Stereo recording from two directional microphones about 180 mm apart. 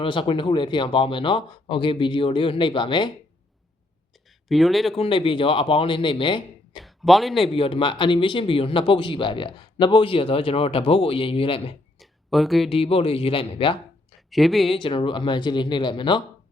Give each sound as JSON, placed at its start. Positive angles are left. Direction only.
{"t": 0.0, "sound": "speech", "side_deg": 30}
{"t": 4.4, "sound": "speech", "side_deg": 0}
{"t": 4.9, "sound": "speech", "side_deg": 30}
{"t": 6.8, "sound": "speech", "side_deg": 0}
{"t": 7.5, "sound": "speech", "side_deg": 30}
{"t": 11.9, "sound": "a sound", "side_deg": 0}
{"t": 12.7, "sound": "a man's voice", "side_deg": 30}
{"t": 14.3, "sound": "speech", "side_deg": 0}
{"t": 14.8, "sound": "speech", "side_deg": 30}